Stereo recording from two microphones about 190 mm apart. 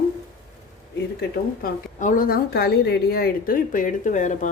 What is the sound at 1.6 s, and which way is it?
A woman's voice, 45° left (ahead or behind).